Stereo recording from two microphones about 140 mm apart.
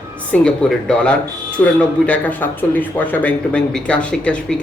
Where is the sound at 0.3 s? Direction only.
5° left (ahead or behind).